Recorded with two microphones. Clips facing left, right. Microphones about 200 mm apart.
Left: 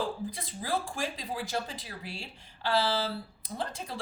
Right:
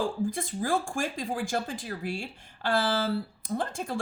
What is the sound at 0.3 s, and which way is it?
Speech, 50° right (ahead or behind).